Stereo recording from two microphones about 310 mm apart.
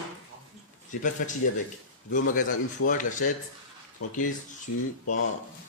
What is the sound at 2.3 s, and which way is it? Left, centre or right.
A man's voice, left.